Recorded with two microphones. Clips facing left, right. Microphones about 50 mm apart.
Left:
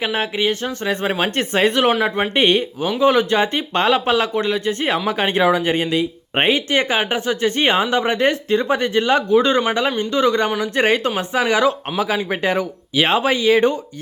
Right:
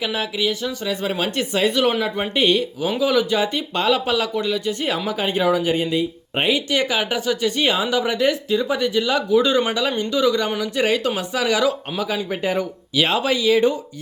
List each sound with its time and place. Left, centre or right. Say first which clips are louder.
0.0 s speech: left 3 dB; left
5.0 s speech: left 3 dB; left
6.3 s speech: left 3 dB; left
11.1 s speech: left 3 dB; left
11.9 s speech: left 4 dB; left
13.0 s speech: left 3 dB; left